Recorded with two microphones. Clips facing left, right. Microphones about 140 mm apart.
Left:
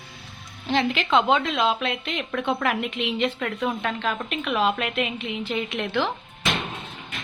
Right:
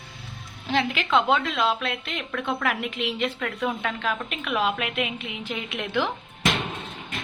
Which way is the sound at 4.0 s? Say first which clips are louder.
Left 2 dB; 5° right (ahead or behind).